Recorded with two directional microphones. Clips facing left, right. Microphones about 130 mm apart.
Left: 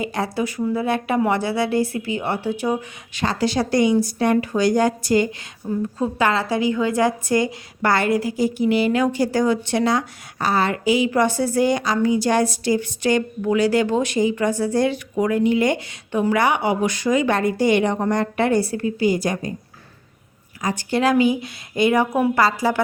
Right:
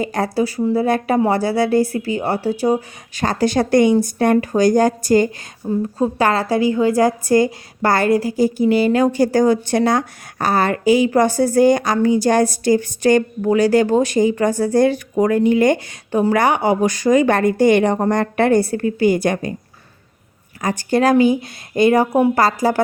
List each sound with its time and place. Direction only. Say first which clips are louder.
0.0 s a woman's voice: right 4 dB; 45° right (ahead or behind)
5.6 s a woman's voice: right 4 dB; 30° right (ahead or behind)
6.0 s a woman's voice: right 3 dB; 40° right (ahead or behind); by 19.5 s 65° right (ahead or behind)
20.6 s a woman's voice: right 4 dB; 50° right (ahead or behind)